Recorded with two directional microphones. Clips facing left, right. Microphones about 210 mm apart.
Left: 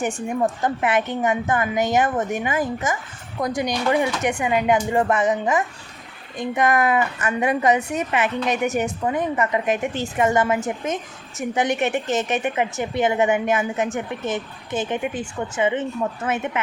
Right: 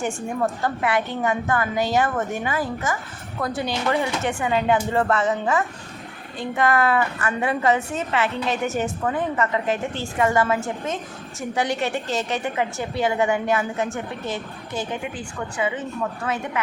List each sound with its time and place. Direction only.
0.4 s a woman's voice: 20° left (ahead or behind)